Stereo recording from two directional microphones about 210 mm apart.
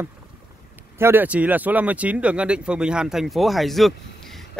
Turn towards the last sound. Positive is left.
turn(degrees=0)  # may be behind; listen again after turning